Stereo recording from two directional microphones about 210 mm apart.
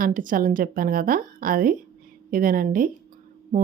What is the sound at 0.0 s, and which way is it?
Speech, 40° right (ahead or behind).